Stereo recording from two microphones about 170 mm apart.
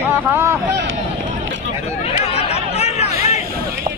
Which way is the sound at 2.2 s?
35° left (ahead or behind).